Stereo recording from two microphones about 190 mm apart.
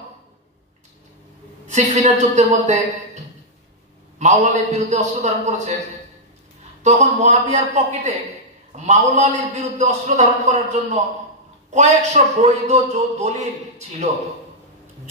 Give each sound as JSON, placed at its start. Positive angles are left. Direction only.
{"t": 1.7, "sound": "a man's voice", "side_deg": -40}
{"t": 4.2, "sound": "a man's voice", "side_deg": -40}
{"t": 6.8, "sound": "a man's voice", "side_deg": -40}